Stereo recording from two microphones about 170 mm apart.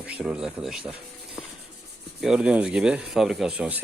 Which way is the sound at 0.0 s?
5° right (ahead or behind).